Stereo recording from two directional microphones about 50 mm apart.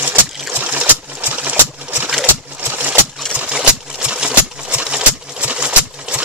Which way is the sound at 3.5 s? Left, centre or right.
Centre.